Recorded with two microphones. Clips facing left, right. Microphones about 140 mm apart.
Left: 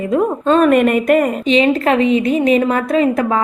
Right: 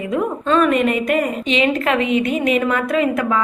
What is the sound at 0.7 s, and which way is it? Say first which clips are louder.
Speech: left 5 dB; 55° left (ahead or behind).